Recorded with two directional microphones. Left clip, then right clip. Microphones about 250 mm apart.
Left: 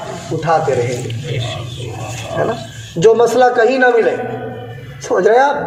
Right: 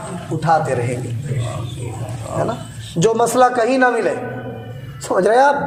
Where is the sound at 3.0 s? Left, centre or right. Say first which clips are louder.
Left 4 dB; right.